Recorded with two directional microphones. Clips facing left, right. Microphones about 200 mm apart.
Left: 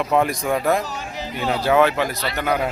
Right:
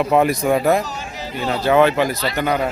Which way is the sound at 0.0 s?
5° right (ahead or behind).